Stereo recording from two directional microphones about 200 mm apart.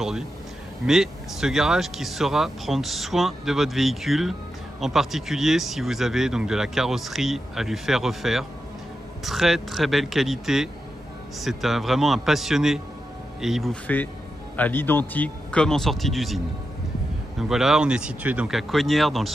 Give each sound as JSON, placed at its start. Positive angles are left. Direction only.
{"t": 0.8, "sound": "speech", "side_deg": 0}
{"t": 17.4, "sound": "speech", "side_deg": 0}